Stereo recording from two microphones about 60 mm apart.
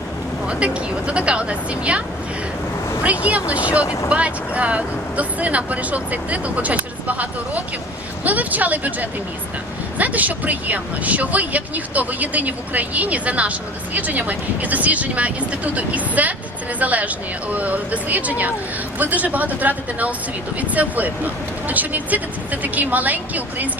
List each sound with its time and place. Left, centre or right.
0.4 s speech: centre